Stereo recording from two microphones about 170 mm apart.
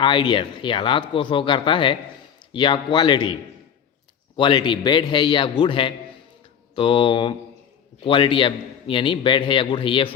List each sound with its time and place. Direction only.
0.0 s a man's voice: 30° left (ahead or behind)
4.4 s a man's voice: 30° left (ahead or behind)